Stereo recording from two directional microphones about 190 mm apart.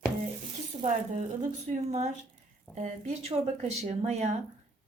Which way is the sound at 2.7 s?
10° left (ahead or behind).